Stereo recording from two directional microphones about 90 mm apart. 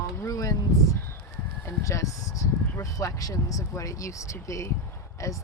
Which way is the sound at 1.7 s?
35° left (ahead or behind).